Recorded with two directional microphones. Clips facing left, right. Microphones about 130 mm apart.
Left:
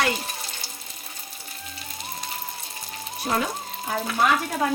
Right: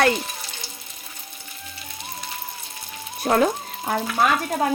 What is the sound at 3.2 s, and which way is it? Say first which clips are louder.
Speech: right 6 dB; 50° right (ahead or behind).